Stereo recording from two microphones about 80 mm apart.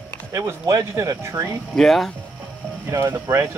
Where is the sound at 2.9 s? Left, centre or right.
Right.